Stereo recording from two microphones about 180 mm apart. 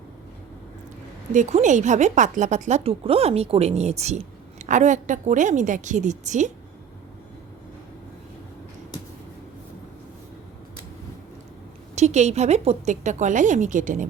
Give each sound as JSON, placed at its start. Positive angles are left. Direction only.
{"t": 1.3, "sound": "speech", "side_deg": -40}
{"t": 11.9, "sound": "speech", "side_deg": -40}